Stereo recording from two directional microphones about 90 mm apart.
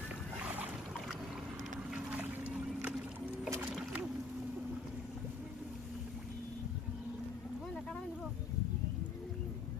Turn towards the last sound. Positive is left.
turn(degrees=5)  # may be behind; listen again after turning